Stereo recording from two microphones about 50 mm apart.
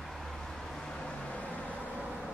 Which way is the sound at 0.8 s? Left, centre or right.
Centre.